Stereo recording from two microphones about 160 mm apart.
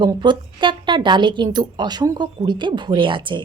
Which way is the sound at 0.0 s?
30° right (ahead or behind).